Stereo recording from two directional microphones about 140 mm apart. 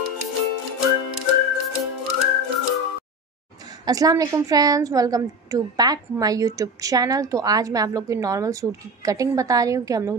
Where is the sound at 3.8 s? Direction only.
25° right (ahead or behind).